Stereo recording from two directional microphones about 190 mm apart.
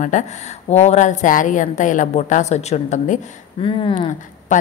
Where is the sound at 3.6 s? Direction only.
25° left (ahead or behind).